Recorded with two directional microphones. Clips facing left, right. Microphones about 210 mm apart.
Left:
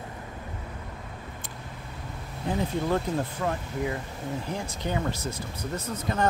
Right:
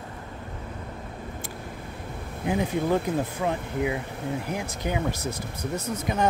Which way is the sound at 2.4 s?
15° right (ahead or behind).